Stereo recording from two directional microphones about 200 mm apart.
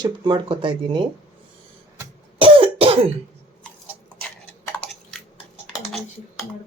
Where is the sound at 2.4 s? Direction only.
25° right (ahead or behind).